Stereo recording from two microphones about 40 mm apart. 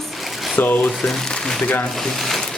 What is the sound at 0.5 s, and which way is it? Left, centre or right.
Speech, left.